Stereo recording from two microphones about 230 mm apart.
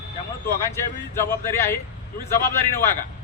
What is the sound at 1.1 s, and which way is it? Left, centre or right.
A man's voice, centre.